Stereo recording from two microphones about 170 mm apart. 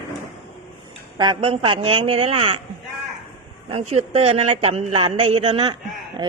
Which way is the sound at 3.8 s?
40° right (ahead or behind).